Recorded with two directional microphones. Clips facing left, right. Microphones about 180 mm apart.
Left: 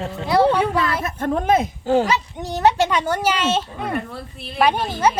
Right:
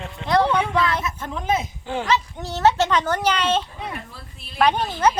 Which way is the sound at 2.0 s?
15° left (ahead or behind).